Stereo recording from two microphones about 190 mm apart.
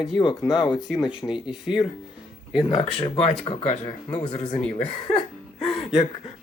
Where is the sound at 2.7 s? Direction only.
30° left (ahead or behind).